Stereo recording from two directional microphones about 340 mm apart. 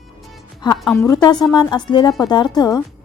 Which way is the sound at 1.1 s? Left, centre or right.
Centre.